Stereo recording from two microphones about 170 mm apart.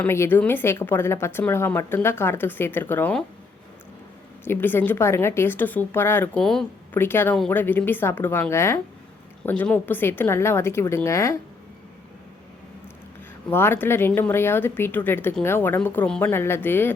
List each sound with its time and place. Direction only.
0.0 s speech: 15° left (ahead or behind)
4.4 s speech: 10° left (ahead or behind)
13.5 s speech: 15° left (ahead or behind)